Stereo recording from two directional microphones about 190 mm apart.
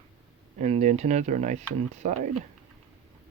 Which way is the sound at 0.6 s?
35° right (ahead or behind).